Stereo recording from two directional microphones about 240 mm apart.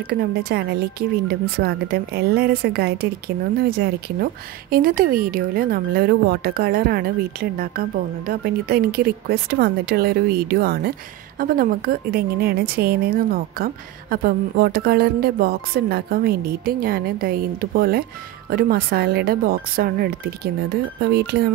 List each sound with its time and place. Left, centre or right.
0.1 s a woman's voice: right